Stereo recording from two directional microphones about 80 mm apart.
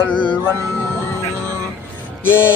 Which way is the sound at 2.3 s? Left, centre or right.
Left.